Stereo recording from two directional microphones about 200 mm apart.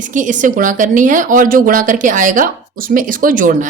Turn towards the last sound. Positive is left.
turn(degrees=-40)  # may be behind; listen again after turning